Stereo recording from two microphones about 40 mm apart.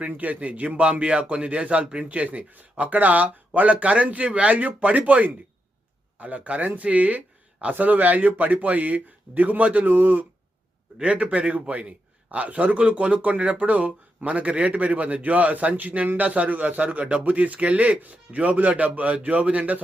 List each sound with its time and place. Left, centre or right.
0.1 s speech: right
0.8 s a man's voice: right
11.0 s a man's voice: right
16.6 s a man's voice: right
18.0 s a man's voice: right